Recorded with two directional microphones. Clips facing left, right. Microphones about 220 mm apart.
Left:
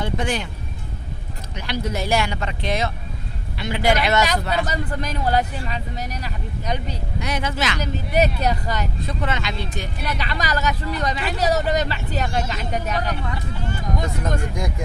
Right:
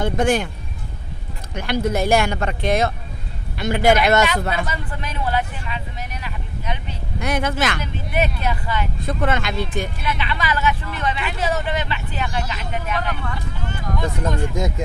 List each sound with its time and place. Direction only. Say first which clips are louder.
0.0 s speech: right 6 dB; 50° right (ahead or behind)
1.5 s speech: right 5 dB; 50° right (ahead or behind)
4.5 s speech: left 3 dB; 40° left (ahead or behind)
7.2 s speech: right 4 dB; 50° right (ahead or behind)
7.8 s speech: left 3 dB; 40° left (ahead or behind)
9.0 s speech: right 7 dB; 50° right (ahead or behind)
10.0 s speech: right 1 dB; 40° left (ahead or behind)
14.2 s speech: right 3 dB; 25° right (ahead or behind)